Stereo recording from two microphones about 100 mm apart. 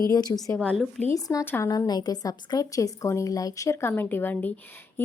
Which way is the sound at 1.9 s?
40° left (ahead or behind).